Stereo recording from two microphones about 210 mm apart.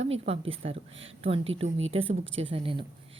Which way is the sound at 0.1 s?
25° right (ahead or behind).